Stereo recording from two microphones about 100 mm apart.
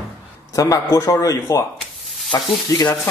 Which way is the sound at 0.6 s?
35° left (ahead or behind).